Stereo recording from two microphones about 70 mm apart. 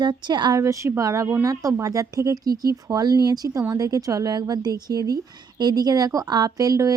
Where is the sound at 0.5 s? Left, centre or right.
Right.